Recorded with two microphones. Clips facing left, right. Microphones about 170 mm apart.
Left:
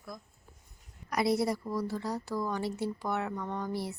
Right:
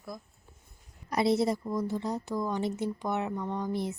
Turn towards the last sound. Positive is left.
turn(degrees=-20)  # may be behind; listen again after turning